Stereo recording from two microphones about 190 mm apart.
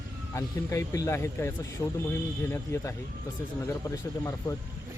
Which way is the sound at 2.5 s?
15° left (ahead or behind).